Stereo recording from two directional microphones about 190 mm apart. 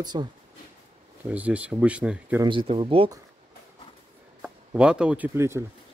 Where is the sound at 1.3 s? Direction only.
5° right (ahead or behind).